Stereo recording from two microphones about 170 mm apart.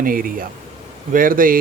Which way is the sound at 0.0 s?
55° right (ahead or behind).